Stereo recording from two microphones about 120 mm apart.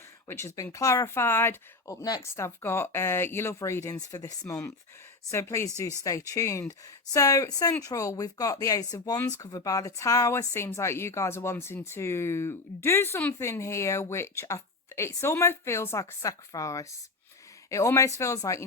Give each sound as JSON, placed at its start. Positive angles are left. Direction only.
{"t": 0.3, "sound": "speech", "side_deg": 20}